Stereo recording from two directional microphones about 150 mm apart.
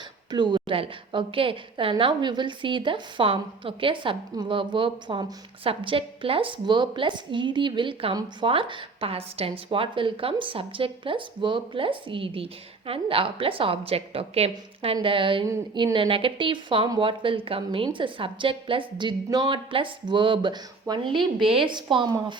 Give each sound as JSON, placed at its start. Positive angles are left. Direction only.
{"t": 0.3, "sound": "speech", "side_deg": -30}